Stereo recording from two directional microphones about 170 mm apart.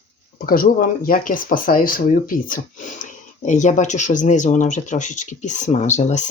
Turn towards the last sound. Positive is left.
turn(degrees=45)  # may be behind; listen again after turning